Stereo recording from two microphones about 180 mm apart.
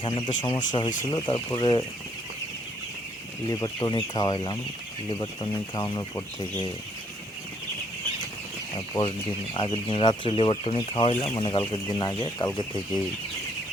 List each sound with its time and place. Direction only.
0.0 s speech: 25° left (ahead or behind)
3.5 s speech: 20° left (ahead or behind)
9.6 s speech: 30° left (ahead or behind)